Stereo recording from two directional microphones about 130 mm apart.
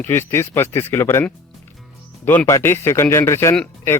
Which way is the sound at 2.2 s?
15° left (ahead or behind).